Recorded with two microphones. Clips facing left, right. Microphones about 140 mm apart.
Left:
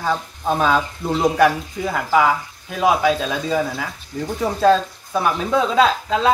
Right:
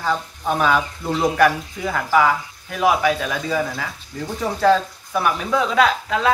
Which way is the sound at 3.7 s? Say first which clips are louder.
Left 2 dB; 5° left (ahead or behind).